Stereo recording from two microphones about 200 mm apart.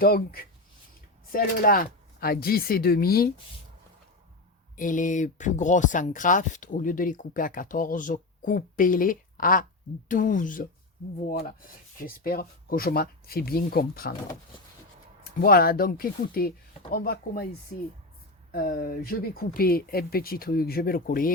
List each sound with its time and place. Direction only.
0.0 s speech: 45° left (ahead or behind)
4.8 s speech: 40° left (ahead or behind)
15.2 s speech: 45° left (ahead or behind)
18.5 s speech: 45° left (ahead or behind)